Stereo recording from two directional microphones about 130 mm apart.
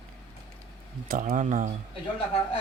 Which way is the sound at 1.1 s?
90° right.